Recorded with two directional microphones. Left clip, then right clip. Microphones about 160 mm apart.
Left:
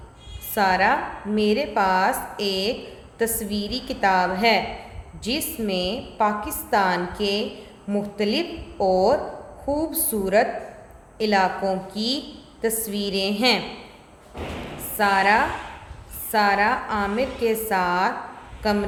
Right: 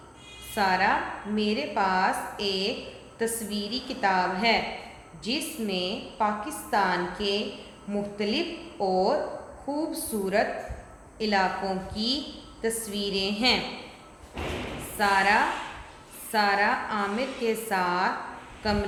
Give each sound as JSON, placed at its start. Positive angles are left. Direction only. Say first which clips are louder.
{"t": 0.5, "sound": "a woman's voice", "louder": "left 4 dB", "side_deg": 35}
{"t": 14.9, "sound": "a woman's voice", "louder": "left 4 dB", "side_deg": 30}